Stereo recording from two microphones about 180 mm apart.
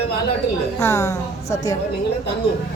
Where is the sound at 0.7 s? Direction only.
15° left (ahead or behind).